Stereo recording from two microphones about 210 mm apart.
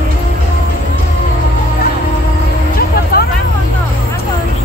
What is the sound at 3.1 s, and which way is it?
Vehicle, 45° left (ahead or behind).